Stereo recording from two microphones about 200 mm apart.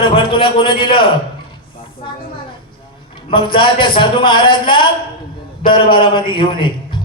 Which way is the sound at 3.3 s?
25° left (ahead or behind).